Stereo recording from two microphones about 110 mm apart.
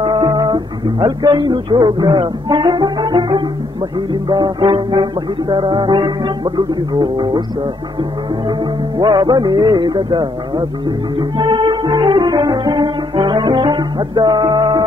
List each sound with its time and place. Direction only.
0.0 s music: 45° right (ahead or behind)
8.5 s music: 40° right (ahead or behind)